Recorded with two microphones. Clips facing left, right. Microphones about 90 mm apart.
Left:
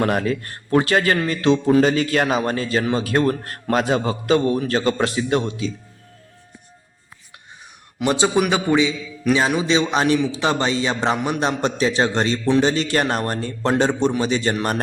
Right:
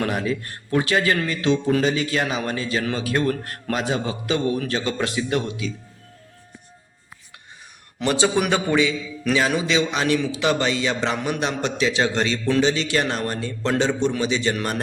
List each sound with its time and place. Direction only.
0.0 s a man's voice: 50° left (ahead or behind); by 5.7 s 30° left (ahead or behind)
8.0 s a man's voice: 20° left (ahead or behind)
9.6 s a man's voice: 30° left (ahead or behind)